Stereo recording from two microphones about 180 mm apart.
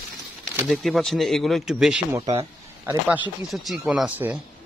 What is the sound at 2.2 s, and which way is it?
Speech, 35° right (ahead or behind).